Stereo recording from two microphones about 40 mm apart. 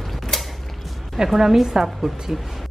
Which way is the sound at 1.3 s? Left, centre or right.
Centre.